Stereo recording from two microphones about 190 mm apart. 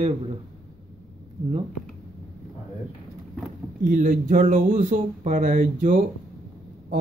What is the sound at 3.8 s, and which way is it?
Speech, 45° right (ahead or behind).